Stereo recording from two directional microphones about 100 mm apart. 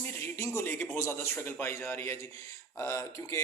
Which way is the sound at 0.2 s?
25° left (ahead or behind).